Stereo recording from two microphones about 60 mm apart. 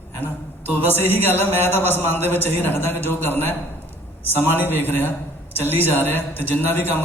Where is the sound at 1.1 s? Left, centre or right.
Left.